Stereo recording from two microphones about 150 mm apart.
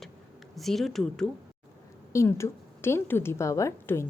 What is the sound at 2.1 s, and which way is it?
A woman's voice, 20° left (ahead or behind).